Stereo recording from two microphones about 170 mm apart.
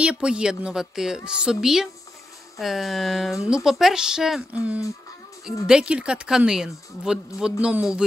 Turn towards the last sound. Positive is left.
turn(degrees=-5)  # may be behind; listen again after turning